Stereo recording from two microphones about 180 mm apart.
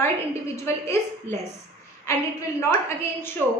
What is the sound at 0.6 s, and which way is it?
A woman's voice, 15° left (ahead or behind).